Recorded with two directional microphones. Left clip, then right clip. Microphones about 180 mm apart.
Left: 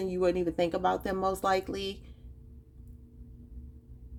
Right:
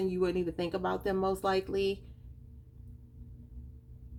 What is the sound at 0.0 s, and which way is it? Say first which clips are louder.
Speech: left 3 dB; 35° left (ahead or behind).